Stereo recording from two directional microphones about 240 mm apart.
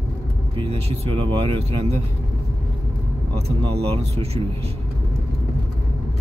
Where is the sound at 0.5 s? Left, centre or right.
Right.